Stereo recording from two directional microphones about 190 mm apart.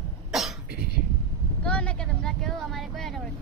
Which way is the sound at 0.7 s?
55° right (ahead or behind).